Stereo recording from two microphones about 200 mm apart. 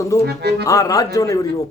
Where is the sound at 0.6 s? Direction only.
15° left (ahead or behind).